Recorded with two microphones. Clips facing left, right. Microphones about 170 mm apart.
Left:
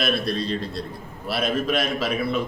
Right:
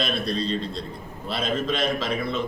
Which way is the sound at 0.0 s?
5° left (ahead or behind).